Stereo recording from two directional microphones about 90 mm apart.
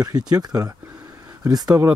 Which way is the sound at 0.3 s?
45° right (ahead or behind).